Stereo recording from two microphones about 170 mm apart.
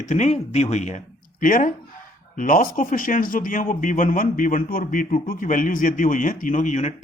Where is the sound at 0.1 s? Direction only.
45° left (ahead or behind).